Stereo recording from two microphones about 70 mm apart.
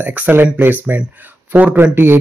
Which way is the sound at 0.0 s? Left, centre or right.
Right.